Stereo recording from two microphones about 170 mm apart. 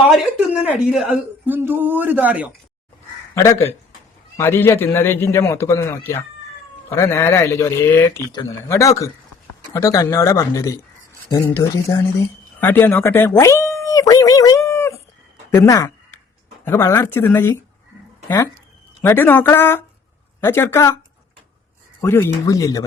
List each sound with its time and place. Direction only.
0.1 s speech: 5° right (ahead or behind)
3.3 s a man's voice: 15° left (ahead or behind)
19.0 s a man's voice: 10° left (ahead or behind)
22.0 s a man's voice: 15° left (ahead or behind)